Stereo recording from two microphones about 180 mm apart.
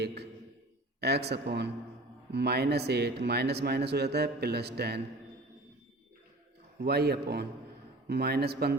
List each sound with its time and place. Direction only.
0.0 s a sound: 65° right (ahead or behind)
1.0 s speech: 65° right (ahead or behind)
6.7 s speech: 65° right (ahead or behind)